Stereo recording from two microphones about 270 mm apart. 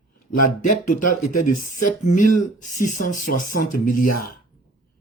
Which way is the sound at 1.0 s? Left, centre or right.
Left.